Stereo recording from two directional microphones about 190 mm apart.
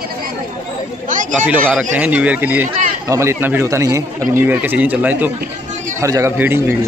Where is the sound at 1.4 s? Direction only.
10° right (ahead or behind).